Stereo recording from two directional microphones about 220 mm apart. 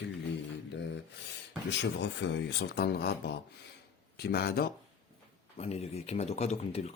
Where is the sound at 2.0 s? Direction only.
55° left (ahead or behind).